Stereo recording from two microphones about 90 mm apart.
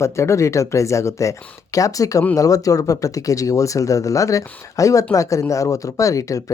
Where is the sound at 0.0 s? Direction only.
30° left (ahead or behind).